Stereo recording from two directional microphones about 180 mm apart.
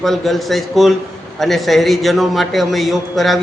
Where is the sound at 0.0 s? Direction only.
Centre (ahead or behind).